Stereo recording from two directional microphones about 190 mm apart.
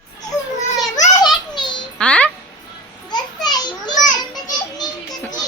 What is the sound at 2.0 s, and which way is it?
Music, 5° left (ahead or behind).